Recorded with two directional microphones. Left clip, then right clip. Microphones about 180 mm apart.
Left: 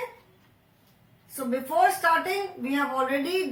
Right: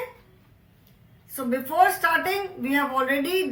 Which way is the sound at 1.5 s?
5° right (ahead or behind).